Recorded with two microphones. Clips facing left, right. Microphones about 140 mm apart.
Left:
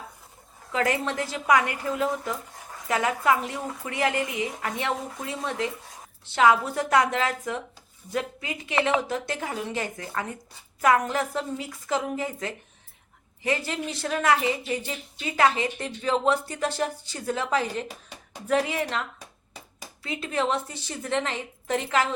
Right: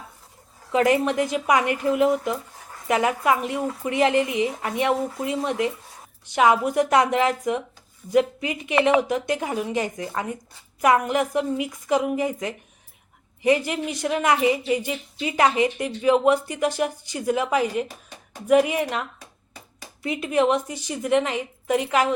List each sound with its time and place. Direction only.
0.7 s a woman's voice: 20° right (ahead or behind)